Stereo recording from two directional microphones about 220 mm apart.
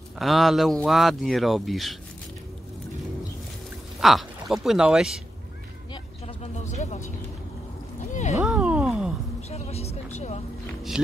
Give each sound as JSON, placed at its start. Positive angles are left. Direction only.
{"t": 0.2, "sound": "speech", "side_deg": 0}
{"t": 4.0, "sound": "speech", "side_deg": 0}
{"t": 6.2, "sound": "vehicle", "side_deg": 30}
{"t": 8.1, "sound": "a sound", "side_deg": 30}
{"t": 8.4, "sound": "a sound", "side_deg": -5}
{"t": 9.5, "sound": "vehicle", "side_deg": 30}